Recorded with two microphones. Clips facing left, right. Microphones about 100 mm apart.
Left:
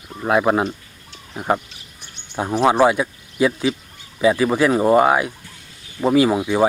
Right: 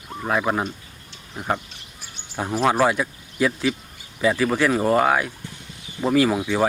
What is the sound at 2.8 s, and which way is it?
Speech, 10° left (ahead or behind).